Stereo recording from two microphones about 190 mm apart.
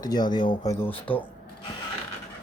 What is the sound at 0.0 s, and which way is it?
Speech, 20° left (ahead or behind).